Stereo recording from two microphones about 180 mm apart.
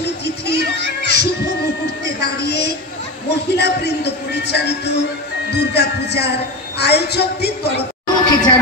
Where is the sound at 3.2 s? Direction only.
65° left (ahead or behind).